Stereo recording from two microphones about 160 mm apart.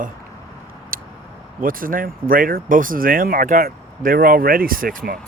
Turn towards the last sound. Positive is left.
turn(degrees=-65)  # may be behind; listen again after turning